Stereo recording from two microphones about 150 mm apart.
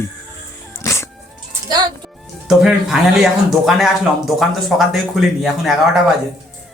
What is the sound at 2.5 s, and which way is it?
Speech, 5° right (ahead or behind).